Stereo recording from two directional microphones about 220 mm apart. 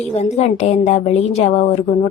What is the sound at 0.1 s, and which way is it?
A woman's voice, 30° left (ahead or behind).